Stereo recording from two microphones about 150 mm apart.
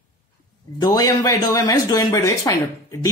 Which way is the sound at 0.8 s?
25° left (ahead or behind).